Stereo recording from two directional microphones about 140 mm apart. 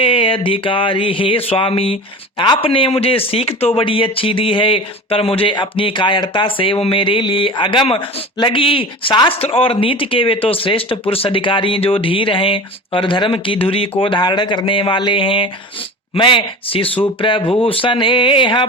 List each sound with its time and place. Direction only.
0.0 s a man's voice: 40° left (ahead or behind)